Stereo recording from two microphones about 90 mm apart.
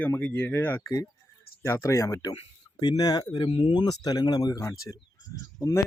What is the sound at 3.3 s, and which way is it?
Speech, 60° left (ahead or behind).